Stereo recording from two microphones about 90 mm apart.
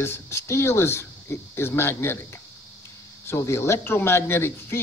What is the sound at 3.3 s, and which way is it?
A man's voice, 30° left (ahead or behind).